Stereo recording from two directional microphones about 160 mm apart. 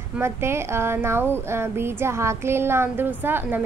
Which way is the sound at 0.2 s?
15° right (ahead or behind).